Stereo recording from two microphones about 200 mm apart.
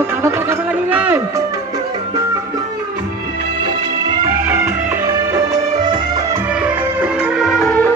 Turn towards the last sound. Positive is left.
turn(degrees=5)  # may be behind; listen again after turning